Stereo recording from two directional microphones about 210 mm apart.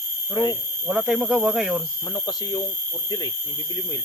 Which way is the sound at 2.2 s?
20° left (ahead or behind).